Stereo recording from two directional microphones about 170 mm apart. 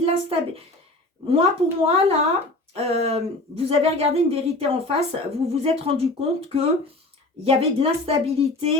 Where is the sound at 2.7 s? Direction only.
40° right (ahead or behind).